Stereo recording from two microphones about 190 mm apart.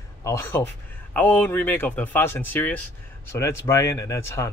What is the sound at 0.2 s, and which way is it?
Speech, 15° left (ahead or behind).